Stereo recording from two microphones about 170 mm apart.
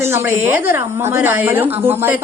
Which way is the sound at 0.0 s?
15° right (ahead or behind).